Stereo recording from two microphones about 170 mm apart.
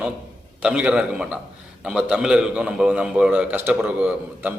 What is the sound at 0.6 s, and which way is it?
A man's voice, 5° right (ahead or behind).